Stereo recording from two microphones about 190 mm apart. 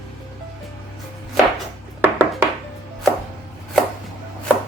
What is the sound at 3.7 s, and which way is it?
Chopping, 5° left (ahead or behind).